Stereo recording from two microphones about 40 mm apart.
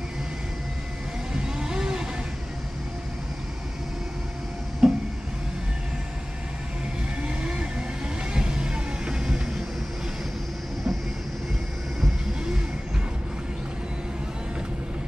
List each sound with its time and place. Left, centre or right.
1.3 s vehicle: centre
4.8 s a sound: centre
7.2 s vehicle: right
8.3 s music: right